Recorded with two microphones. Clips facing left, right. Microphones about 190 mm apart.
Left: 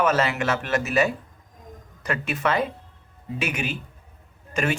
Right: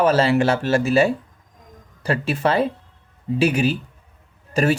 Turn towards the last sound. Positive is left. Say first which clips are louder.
# right 6 dB
turn(degrees=-35)  # may be behind; listen again after turning